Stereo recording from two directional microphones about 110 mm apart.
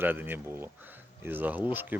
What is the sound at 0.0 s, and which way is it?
Speech, 20° right (ahead or behind).